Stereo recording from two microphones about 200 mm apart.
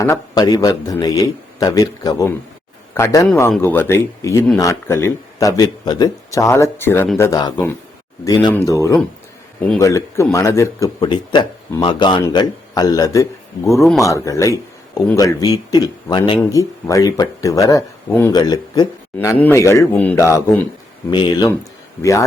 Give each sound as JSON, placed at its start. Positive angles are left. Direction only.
{"t": 0.0, "sound": "speech", "side_deg": 15}
{"t": 21.1, "sound": "speech", "side_deg": 20}